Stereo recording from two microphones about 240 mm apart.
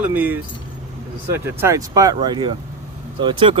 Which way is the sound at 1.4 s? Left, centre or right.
Centre.